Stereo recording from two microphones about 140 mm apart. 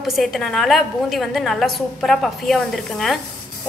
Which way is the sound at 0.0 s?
Centre (ahead or behind).